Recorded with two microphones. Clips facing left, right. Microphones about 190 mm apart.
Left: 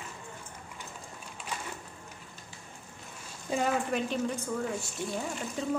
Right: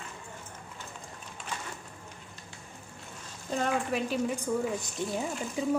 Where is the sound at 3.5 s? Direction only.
5° left (ahead or behind).